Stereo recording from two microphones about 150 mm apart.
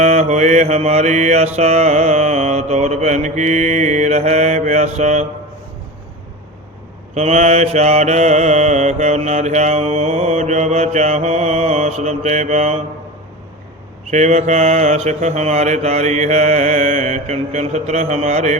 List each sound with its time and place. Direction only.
0.0 s mantra: 50° right (ahead or behind)
7.1 s mantra: 50° right (ahead or behind)
14.1 s mantra: 50° right (ahead or behind)